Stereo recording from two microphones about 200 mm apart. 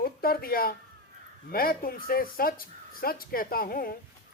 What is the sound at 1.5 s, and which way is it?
Speech, 45° left (ahead or behind).